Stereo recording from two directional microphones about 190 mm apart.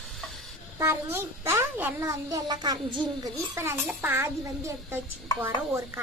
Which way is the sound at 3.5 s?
10° right (ahead or behind).